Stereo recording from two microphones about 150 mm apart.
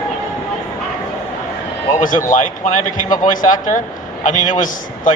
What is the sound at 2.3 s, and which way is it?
A man's voice, 60° left (ahead or behind).